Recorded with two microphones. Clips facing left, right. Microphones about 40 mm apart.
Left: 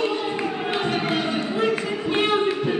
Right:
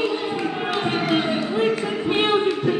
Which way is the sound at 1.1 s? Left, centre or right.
Right.